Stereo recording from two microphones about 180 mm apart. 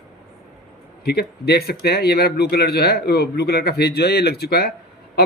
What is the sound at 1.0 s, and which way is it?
A man's voice, 60° left (ahead or behind).